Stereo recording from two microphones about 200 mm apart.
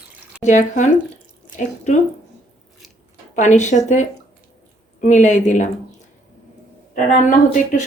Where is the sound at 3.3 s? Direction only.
35° left (ahead or behind).